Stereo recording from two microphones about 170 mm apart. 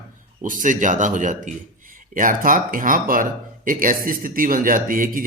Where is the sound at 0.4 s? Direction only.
50° right (ahead or behind).